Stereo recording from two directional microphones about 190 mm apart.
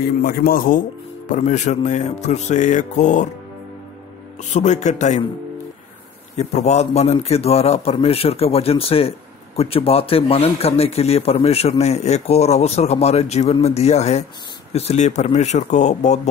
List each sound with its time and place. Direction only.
0.0 s a man's voice: 55° left (ahead or behind); by 3.3 s 40° left (ahead or behind)
4.6 s a man's voice: 40° left (ahead or behind)
6.3 s a man's voice: 35° left (ahead or behind)